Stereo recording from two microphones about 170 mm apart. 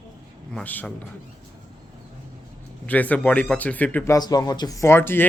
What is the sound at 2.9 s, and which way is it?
A man's voice, 10° left (ahead or behind).